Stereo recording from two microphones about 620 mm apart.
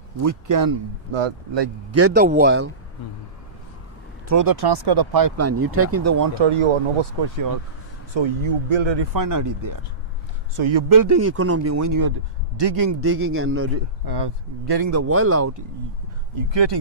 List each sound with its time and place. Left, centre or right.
0.2 s speech: right
1.1 s speech: right
1.9 s speech: right
4.3 s speech: right
6.4 s speech: right
8.1 s speech: right
10.5 s speech: right
10.9 s a man's voice: right
13.0 s speech: right
14.0 s speech: right
16.3 s speech: right